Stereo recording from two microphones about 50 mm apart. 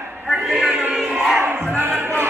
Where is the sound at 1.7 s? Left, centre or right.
Right.